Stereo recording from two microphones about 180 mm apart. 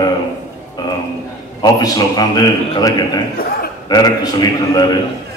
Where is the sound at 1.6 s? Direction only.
20° left (ahead or behind).